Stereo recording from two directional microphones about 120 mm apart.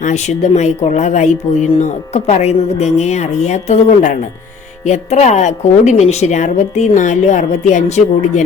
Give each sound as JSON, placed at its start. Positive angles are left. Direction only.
{"t": 0.0, "sound": "speech", "side_deg": 70}
{"t": 4.9, "sound": "a woman's voice", "side_deg": 70}